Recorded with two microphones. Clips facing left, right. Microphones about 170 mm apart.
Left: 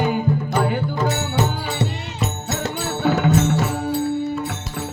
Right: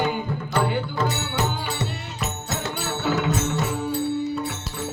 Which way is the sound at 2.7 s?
50° left (ahead or behind).